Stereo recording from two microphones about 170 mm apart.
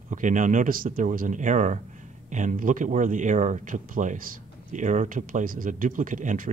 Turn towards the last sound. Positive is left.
turn(degrees=-50)  # may be behind; listen again after turning